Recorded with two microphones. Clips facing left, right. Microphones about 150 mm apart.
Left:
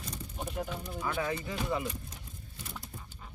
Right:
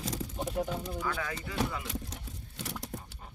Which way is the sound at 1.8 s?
90° right.